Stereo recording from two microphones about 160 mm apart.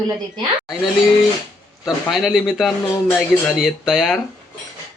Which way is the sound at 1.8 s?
Centre (ahead or behind).